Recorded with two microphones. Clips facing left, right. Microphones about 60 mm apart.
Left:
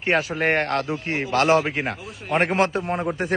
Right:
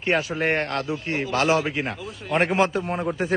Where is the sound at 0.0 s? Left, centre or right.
Left.